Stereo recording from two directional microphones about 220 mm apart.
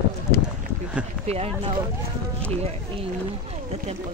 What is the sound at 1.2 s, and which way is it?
Speech, 30° right (ahead or behind).